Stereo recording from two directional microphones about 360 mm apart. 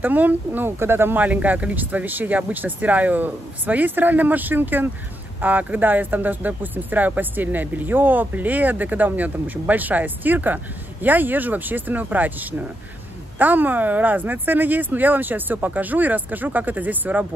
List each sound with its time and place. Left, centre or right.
0.0 s speech: centre